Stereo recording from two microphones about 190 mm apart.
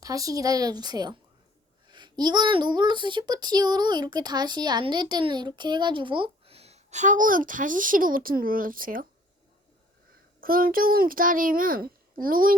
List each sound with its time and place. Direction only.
0.0 s speech: 20° right (ahead or behind); by 9.0 s 45° right (ahead or behind)
10.4 s a child's voice: 50° right (ahead or behind)